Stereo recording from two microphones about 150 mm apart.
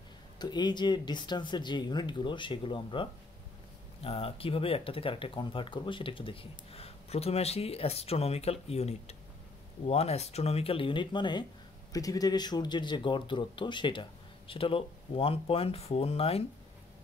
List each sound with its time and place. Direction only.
0.4 s speech: 30° left (ahead or behind)